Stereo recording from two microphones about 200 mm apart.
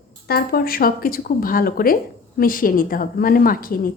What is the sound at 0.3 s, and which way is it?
A woman's voice, 50° left (ahead or behind).